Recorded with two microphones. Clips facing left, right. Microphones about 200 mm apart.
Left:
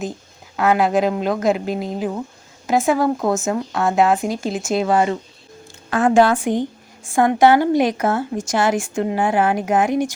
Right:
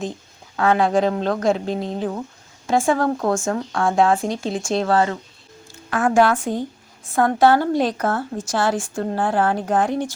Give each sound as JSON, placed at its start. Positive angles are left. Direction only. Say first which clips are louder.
{"t": 0.5, "sound": "a woman's voice", "louder": "left 1 dB", "side_deg": 5}